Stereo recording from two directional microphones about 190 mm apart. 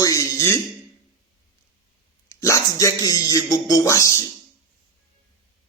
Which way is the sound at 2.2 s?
15° left (ahead or behind).